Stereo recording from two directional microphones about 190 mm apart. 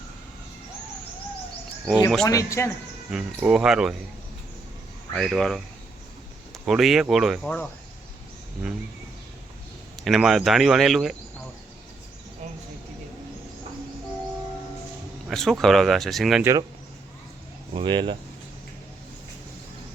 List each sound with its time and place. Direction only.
2.2 s a man's voice: 15° left (ahead or behind)
3.1 s speech: 5° right (ahead or behind)
5.1 s speech: centre (ahead or behind)
10.0 s speech: centre (ahead or behind)
15.3 s speech: centre (ahead or behind)
16.4 s speech: 15° right (ahead or behind)
17.7 s speech: 25° right (ahead or behind)